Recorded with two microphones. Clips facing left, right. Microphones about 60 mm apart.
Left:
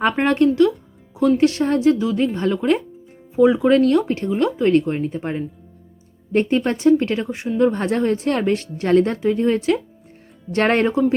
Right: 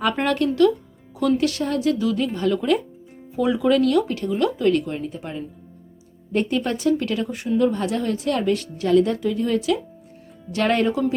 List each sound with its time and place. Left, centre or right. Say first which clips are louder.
0.3 s a woman's voice: left 2 dB; left
7.6 s a woman's voice: left 5 dB; left